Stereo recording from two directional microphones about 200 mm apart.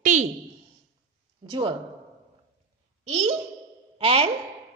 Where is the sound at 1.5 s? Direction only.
25° right (ahead or behind).